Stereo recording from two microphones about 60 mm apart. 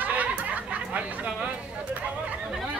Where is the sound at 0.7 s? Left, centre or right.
Right.